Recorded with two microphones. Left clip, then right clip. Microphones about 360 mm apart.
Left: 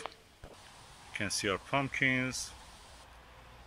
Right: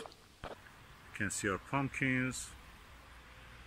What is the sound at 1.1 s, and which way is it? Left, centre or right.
Speech, centre.